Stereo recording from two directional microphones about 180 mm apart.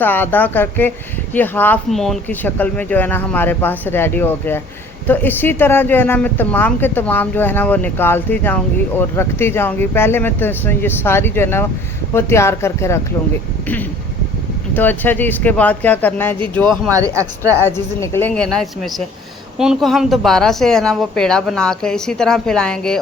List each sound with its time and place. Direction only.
0.0 s speech: 10° left (ahead or behind)
14.7 s speech: 10° left (ahead or behind)
16.9 s speech: 15° right (ahead or behind)
17.6 s a woman's voice: 15° left (ahead or behind)